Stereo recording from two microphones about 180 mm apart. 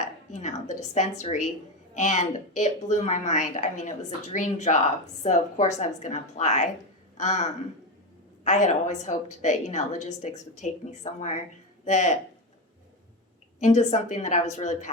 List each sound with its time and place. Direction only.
0.3 s a sound: 40° left (ahead or behind)
1.2 s a woman's voice: 40° left (ahead or behind)
13.6 s a woman's voice: 40° left (ahead or behind)